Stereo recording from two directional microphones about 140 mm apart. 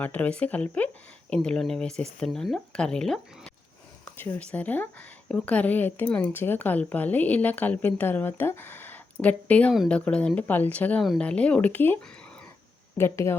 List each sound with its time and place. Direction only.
0.0 s a woman's voice: 10° left (ahead or behind)
13.0 s speech: 20° left (ahead or behind)